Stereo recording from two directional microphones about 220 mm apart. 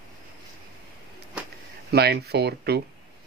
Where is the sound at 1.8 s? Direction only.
45° right (ahead or behind).